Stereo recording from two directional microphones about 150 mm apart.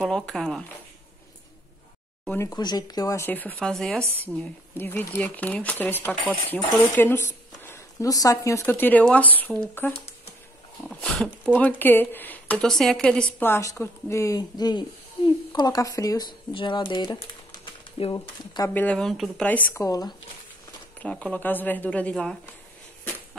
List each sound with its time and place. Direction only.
0.0 s speech: 5° left (ahead or behind)
2.3 s a woman's voice: 25° left (ahead or behind); by 13.2 s 5° left (ahead or behind)
13.4 s speech: 15° left (ahead or behind)
18.7 s speech: 10° left (ahead or behind)
19.7 s speech: 25° left (ahead or behind)
21.0 s speech: 10° left (ahead or behind)